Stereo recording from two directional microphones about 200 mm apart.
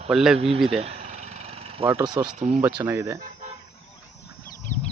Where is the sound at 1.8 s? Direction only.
15° right (ahead or behind).